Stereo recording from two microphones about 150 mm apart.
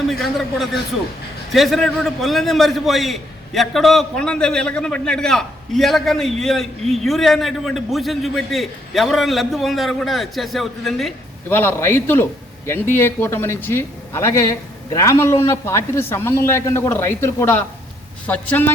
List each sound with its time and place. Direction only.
0.1 s a man's voice: centre (ahead or behind)
11.4 s a man's voice: 15° left (ahead or behind)